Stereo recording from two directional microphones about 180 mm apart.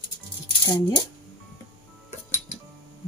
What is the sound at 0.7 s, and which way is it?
Speech, 20° left (ahead or behind).